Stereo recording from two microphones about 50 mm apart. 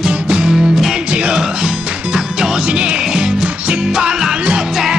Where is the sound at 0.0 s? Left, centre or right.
Centre.